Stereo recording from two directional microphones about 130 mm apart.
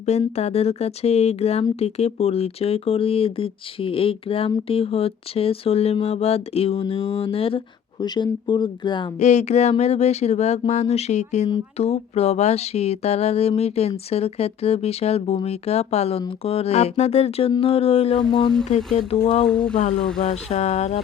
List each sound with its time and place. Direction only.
0.0 s speech: 55° left (ahead or behind)
8.0 s speech: 35° left (ahead or behind)
9.2 s speech: 60° left (ahead or behind)
18.3 s speech: 35° left (ahead or behind)
18.9 s speech: 55° left (ahead or behind)
19.5 s speech: 5° left (ahead or behind)
20.2 s speech: 55° left (ahead or behind)